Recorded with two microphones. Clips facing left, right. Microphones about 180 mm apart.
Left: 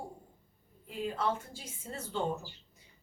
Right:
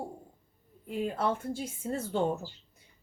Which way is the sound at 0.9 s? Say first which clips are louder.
Right 3 dB; 55° right (ahead or behind).